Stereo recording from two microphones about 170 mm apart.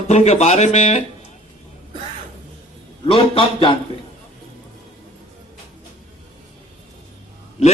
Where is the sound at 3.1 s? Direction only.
35° left (ahead or behind).